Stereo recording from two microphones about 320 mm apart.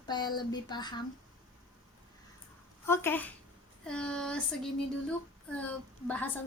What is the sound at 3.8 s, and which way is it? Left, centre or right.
Child singing, centre.